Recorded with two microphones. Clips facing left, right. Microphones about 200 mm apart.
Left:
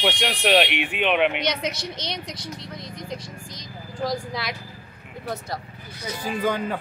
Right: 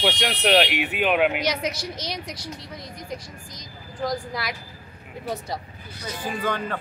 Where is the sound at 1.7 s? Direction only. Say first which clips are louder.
Even; 25° left (ahead or behind).